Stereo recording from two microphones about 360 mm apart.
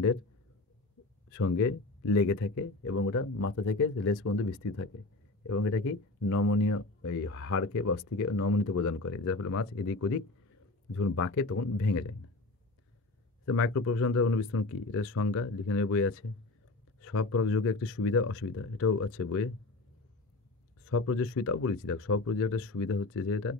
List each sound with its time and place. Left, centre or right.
1.3 s speech: left
13.5 s speech: left
20.8 s speech: left